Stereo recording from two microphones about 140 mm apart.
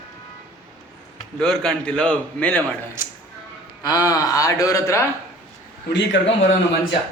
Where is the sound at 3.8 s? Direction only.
25° left (ahead or behind).